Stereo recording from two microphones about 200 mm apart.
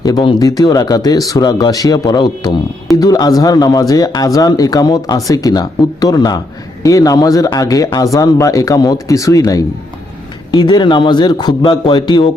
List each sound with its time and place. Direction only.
0.0 s a man's voice: 20° left (ahead or behind)